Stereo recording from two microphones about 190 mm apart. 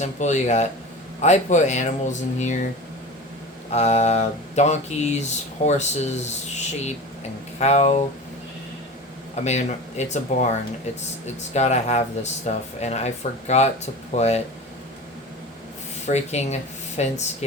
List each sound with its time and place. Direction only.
0.0 s speech: 40° left (ahead or behind)
3.7 s speech: 35° left (ahead or behind)
9.3 s speech: 35° left (ahead or behind)
11.5 s speech: 35° left (ahead or behind)
16.0 s speech: 35° left (ahead or behind)